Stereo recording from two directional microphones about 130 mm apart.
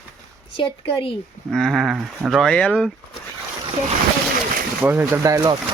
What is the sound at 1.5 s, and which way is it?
Speech, centre (ahead or behind).